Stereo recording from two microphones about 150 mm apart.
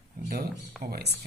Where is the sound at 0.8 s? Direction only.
85° right.